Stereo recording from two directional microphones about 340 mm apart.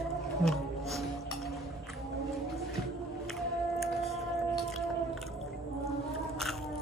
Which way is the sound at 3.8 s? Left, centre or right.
Centre.